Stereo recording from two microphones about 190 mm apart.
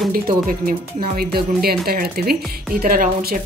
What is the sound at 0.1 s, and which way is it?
Speech, 50° right (ahead or behind).